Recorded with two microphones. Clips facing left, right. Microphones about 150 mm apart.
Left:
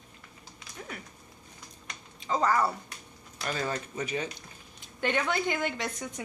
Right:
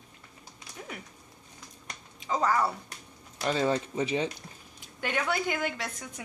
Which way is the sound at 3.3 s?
25° right (ahead or behind).